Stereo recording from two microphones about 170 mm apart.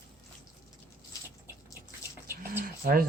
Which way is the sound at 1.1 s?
20° left (ahead or behind).